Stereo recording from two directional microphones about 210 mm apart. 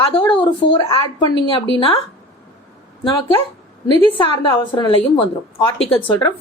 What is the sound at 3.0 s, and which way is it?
A woman's voice, 15° left (ahead or behind).